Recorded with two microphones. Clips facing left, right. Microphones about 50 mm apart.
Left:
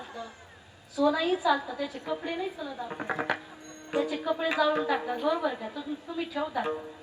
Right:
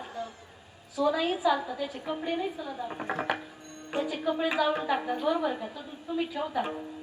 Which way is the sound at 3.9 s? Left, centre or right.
Right.